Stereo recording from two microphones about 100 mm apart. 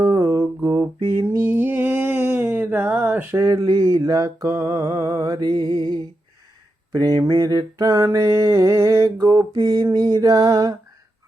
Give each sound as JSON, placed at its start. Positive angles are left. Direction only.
{"t": 0.0, "sound": "mantra", "side_deg": -30}
{"t": 1.3, "sound": "a sound", "side_deg": -25}
{"t": 6.9, "sound": "mantra", "side_deg": -40}